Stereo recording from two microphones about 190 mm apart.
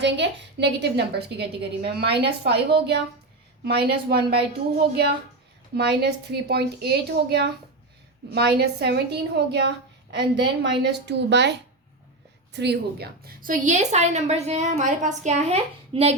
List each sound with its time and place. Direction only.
0.0 s a woman's voice: 65° right (ahead or behind); by 16.1 s 30° right (ahead or behind)